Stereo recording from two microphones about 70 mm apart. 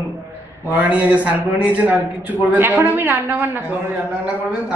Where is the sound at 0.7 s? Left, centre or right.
Right.